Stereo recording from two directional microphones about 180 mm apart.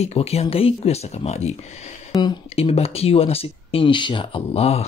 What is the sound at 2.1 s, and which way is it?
Speech, 25° left (ahead or behind).